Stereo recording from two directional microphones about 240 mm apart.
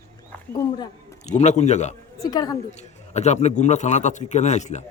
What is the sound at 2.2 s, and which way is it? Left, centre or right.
Speech, centre.